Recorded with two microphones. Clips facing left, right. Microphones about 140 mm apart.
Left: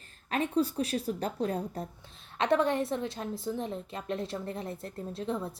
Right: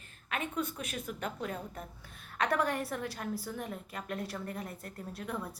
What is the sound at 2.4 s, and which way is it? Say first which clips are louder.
A woman's voice: left 5 dB; 25° left (ahead or behind).